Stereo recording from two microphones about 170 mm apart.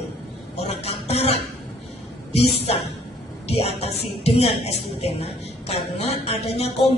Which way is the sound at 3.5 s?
35° left (ahead or behind).